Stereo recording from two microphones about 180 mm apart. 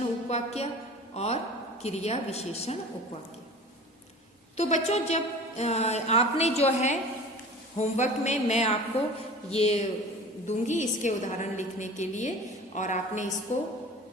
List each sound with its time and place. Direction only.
0.3 s a woman's voice: 35° left (ahead or behind)
4.5 s a woman's voice: 40° left (ahead or behind)